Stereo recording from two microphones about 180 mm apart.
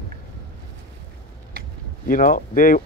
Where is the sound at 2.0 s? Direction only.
50° left (ahead or behind).